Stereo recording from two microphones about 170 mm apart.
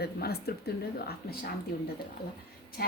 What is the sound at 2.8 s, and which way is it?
Speech, 60° left (ahead or behind).